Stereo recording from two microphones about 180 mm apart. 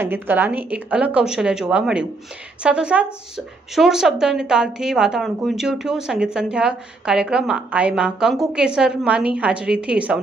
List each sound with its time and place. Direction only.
0.0 s a woman's voice: 10° right (ahead or behind)